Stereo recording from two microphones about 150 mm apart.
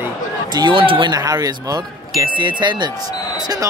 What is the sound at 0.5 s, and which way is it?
Speech, 35° right (ahead or behind).